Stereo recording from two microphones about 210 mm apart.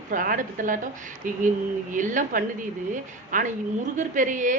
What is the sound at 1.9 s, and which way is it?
Speech, 40° right (ahead or behind).